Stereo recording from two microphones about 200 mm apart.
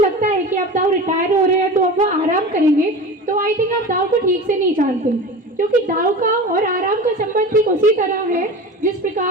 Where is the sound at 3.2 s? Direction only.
40° right (ahead or behind).